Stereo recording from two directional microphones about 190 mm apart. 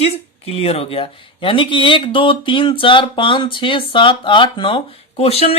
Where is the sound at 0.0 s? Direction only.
30° left (ahead or behind).